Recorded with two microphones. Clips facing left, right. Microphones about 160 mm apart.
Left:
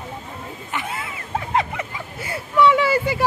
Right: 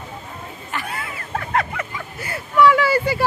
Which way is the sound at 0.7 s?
20° left (ahead or behind).